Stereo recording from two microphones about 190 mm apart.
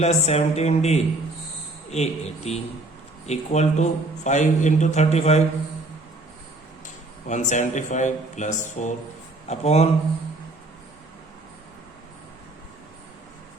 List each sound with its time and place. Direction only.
0.0 s a man's voice: 35° left (ahead or behind)
7.3 s a man's voice: 40° left (ahead or behind)